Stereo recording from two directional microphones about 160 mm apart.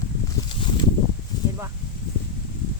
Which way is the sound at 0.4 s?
30° left (ahead or behind).